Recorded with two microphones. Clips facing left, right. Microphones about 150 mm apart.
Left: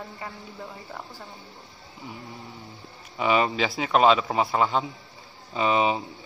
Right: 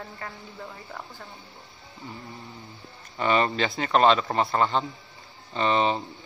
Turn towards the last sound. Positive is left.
turn(degrees=5)  # may be behind; listen again after turning